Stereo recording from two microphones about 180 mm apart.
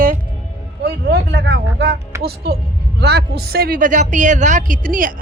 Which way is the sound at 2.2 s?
65° right (ahead or behind).